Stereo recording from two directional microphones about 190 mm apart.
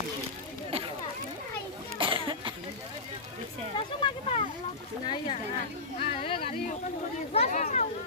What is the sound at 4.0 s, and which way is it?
Speech, 30° left (ahead or behind).